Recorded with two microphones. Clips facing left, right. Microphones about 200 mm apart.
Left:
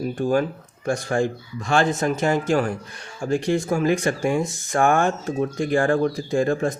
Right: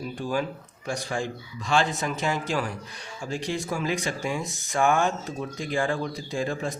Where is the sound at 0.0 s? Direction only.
50° left (ahead or behind).